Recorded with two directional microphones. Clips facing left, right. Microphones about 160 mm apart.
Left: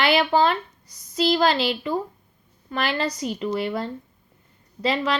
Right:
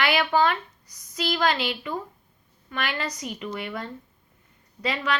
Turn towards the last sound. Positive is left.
turn(degrees=30)  # may be behind; listen again after turning